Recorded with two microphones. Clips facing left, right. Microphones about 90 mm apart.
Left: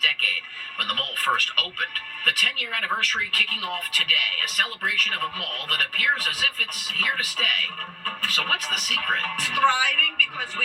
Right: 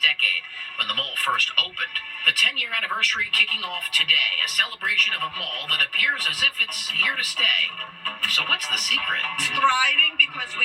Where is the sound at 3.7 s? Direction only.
30° left (ahead or behind).